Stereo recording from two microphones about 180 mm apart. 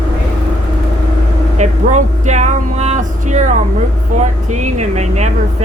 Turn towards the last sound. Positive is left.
turn(degrees=-40)  # may be behind; listen again after turning